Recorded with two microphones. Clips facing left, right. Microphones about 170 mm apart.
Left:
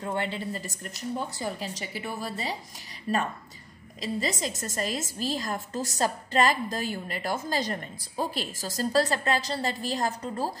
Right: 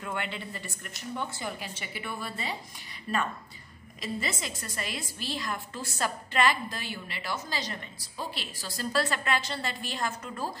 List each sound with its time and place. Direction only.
0.0 s a woman's voice: 35° left (ahead or behind)